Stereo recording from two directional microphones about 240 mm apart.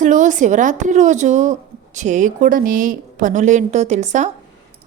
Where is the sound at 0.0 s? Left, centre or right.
Right.